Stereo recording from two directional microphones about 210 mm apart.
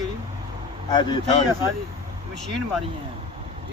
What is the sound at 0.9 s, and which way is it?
Speech, 20° left (ahead or behind).